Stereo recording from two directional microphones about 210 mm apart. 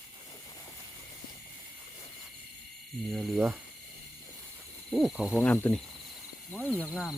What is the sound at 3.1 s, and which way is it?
Speech, centre (ahead or behind).